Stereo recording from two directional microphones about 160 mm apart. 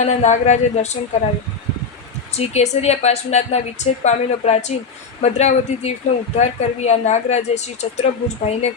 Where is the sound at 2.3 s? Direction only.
45° left (ahead or behind).